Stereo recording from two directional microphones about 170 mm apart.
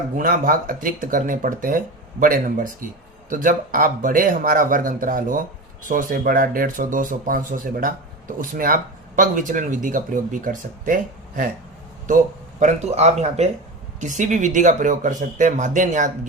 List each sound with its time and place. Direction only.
0.2 s speech: 55° right (ahead or behind)